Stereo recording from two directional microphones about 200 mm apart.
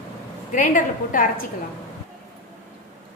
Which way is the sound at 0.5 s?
40° left (ahead or behind).